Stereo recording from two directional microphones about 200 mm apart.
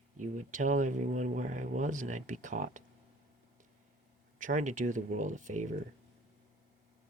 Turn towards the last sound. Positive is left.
turn(degrees=-40)  # may be behind; listen again after turning